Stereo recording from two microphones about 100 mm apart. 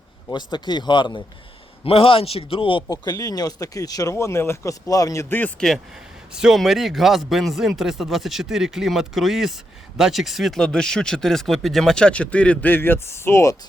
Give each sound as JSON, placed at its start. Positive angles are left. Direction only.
{"t": 0.3, "sound": "speech", "side_deg": 50}
{"t": 1.8, "sound": "a man's voice", "side_deg": 70}
{"t": 2.9, "sound": "speech", "side_deg": 40}
{"t": 5.3, "sound": "speech", "side_deg": 15}
{"t": 6.3, "sound": "speech", "side_deg": -5}